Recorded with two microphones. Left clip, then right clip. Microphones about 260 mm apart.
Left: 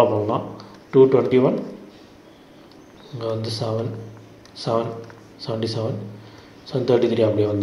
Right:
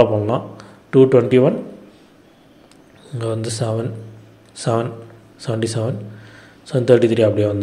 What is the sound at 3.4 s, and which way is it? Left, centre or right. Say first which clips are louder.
Speech: right 3 dB; right.